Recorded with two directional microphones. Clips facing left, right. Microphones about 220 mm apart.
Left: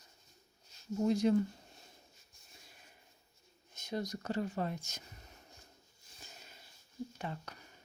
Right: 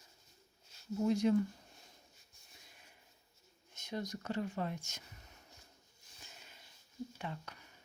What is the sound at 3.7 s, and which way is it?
Speech, 35° left (ahead or behind).